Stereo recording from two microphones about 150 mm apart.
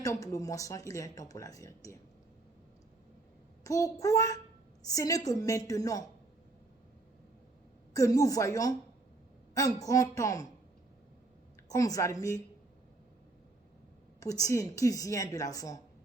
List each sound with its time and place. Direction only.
0.0 s speech: 20° left (ahead or behind)
3.6 s speech: 20° left (ahead or behind)
7.9 s speech: 20° left (ahead or behind)
11.7 s speech: 20° left (ahead or behind)
14.2 s speech: 20° left (ahead or behind)